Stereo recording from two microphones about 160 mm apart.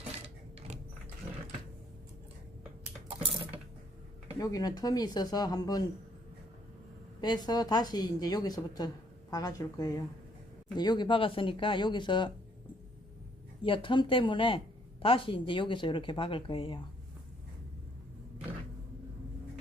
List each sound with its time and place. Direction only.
4.4 s a woman's voice: 25° left (ahead or behind)
7.2 s a woman's voice: 25° left (ahead or behind)
13.7 s speech: 30° left (ahead or behind)